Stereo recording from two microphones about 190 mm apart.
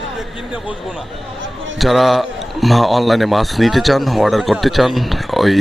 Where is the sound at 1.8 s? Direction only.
Centre (ahead or behind).